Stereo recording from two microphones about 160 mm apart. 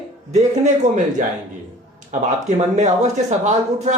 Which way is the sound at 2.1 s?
50° right (ahead or behind).